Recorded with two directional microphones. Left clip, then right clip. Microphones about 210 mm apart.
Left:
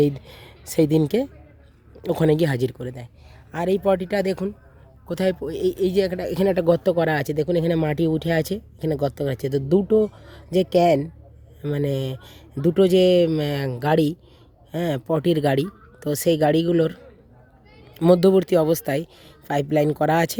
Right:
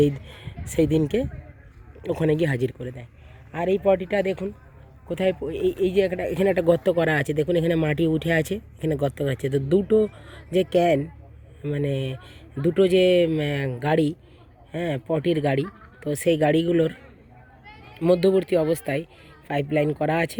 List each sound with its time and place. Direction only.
0.0 s speech: 20° left (ahead or behind)
18.0 s speech: 20° left (ahead or behind)